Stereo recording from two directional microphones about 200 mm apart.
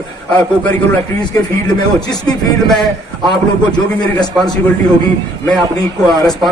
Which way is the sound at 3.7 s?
20° left (ahead or behind).